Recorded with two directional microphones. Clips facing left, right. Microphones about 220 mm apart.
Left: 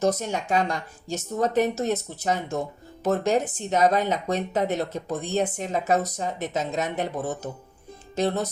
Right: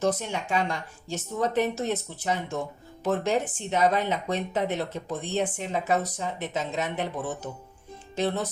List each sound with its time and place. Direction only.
0.0 s speech: 40° left (ahead or behind)